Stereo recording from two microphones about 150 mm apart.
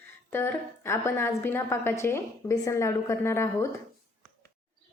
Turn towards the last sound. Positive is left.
turn(degrees=15)  # may be behind; listen again after turning